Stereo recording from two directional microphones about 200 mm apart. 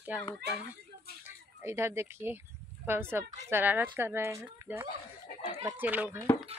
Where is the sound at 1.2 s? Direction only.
10° right (ahead or behind).